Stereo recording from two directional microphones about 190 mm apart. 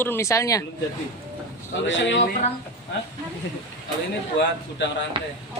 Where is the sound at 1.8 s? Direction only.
70° left (ahead or behind).